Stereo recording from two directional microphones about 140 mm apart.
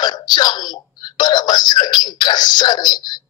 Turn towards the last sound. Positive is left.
turn(degrees=30)  # may be behind; listen again after turning